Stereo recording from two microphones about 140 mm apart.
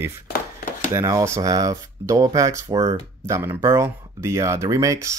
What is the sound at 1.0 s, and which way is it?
Speech, 20° right (ahead or behind).